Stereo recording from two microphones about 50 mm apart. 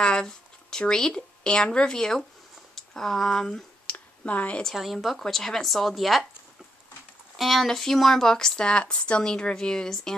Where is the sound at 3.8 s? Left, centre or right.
Left.